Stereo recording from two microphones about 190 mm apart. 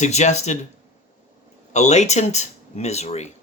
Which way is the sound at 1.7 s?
35° left (ahead or behind).